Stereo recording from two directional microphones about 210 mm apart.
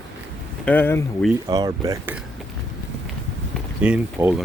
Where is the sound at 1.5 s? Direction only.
20° right (ahead or behind).